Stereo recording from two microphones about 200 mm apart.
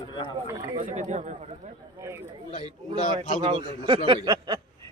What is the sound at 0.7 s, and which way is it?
Speech, 35° right (ahead or behind).